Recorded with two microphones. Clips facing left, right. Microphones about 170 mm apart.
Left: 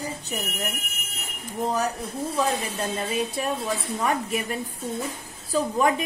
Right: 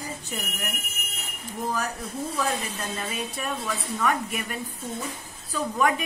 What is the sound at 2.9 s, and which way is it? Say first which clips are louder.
A woman's voice: left 5 dB; 30° left (ahead or behind).